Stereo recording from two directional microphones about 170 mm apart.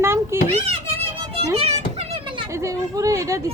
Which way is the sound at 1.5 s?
40° right (ahead or behind).